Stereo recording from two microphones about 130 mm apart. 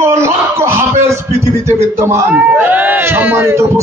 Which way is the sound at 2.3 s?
10° right (ahead or behind).